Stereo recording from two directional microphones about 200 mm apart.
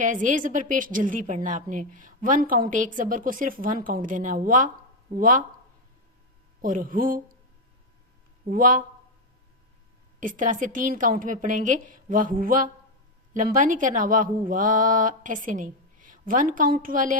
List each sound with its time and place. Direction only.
0.0 s a woman's voice: 40° right (ahead or behind)
6.6 s speech: 45° right (ahead or behind)
8.4 s speech: 45° right (ahead or behind)
10.2 s a woman's voice: 40° right (ahead or behind)